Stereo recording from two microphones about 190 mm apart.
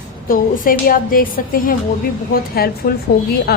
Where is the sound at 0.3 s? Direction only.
45° left (ahead or behind).